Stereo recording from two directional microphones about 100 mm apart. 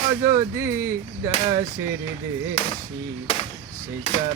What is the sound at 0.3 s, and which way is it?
Speech, 30° right (ahead or behind).